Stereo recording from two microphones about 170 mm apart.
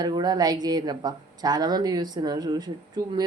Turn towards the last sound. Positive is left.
turn(degrees=-25)  # may be behind; listen again after turning